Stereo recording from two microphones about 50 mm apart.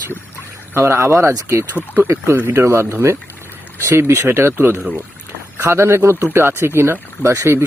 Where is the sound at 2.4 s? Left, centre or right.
Right.